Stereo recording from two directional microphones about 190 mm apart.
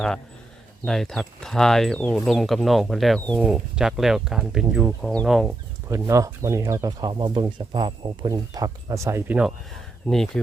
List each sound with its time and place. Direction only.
0.9 s speech: centre (ahead or behind)
5.9 s speech: 15° right (ahead or behind)
10.1 s speech: 5° left (ahead or behind)